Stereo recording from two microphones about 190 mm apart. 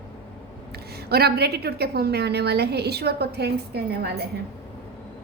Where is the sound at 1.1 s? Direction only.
55° right (ahead or behind).